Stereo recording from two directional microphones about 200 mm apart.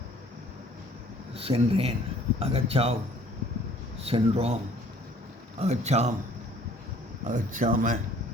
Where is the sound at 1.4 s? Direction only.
30° right (ahead or behind).